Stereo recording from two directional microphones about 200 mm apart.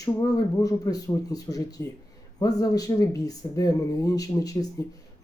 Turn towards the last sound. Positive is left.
turn(degrees=15)  # may be behind; listen again after turning